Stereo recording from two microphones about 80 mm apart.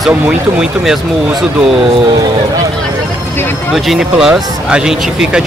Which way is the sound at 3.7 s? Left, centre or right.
Centre.